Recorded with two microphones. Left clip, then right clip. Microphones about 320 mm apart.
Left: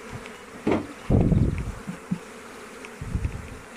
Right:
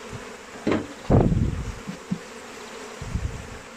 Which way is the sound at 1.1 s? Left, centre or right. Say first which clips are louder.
Right 4 dB; right.